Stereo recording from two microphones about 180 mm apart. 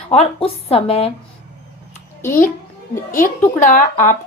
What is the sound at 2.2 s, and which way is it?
Speech, 10° left (ahead or behind).